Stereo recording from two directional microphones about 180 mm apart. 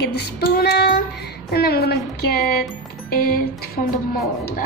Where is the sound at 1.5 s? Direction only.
60° left (ahead or behind).